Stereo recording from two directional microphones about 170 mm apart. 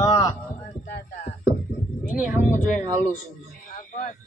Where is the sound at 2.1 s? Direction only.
5° right (ahead or behind).